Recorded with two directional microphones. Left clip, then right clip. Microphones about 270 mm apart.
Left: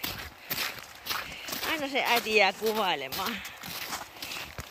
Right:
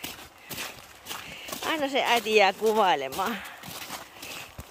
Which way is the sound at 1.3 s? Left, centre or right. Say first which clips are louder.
Right 2 dB; centre.